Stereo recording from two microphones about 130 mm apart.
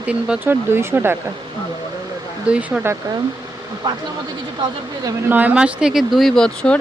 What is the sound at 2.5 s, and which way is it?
Speech, 10° right (ahead or behind).